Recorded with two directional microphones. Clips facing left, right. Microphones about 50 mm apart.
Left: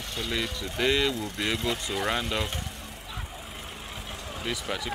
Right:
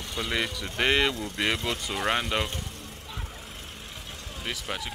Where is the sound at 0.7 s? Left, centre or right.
Right.